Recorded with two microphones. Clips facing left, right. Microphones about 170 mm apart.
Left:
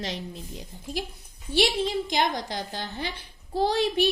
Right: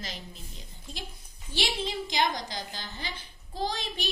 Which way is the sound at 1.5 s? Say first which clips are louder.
Left 8 dB; 50° left (ahead or behind).